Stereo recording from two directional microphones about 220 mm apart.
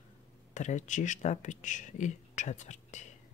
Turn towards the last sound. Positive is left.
turn(degrees=30)  # may be behind; listen again after turning